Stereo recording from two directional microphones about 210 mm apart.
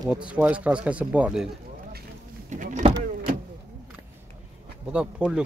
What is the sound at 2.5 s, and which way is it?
Power windows, 35° right (ahead or behind).